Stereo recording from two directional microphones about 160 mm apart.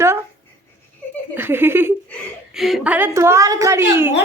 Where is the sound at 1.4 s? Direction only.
15° right (ahead or behind).